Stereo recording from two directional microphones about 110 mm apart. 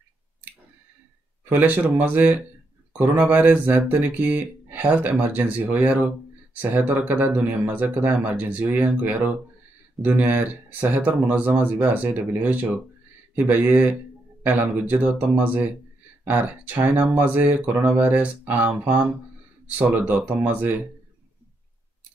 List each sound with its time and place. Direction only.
1.4 s speech: 15° right (ahead or behind)